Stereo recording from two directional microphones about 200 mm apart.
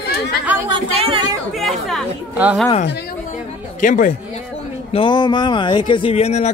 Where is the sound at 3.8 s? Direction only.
40° left (ahead or behind).